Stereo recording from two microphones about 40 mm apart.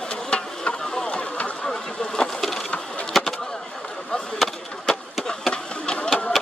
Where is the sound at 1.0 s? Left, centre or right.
Left.